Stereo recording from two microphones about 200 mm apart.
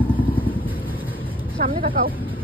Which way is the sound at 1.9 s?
45° right (ahead or behind).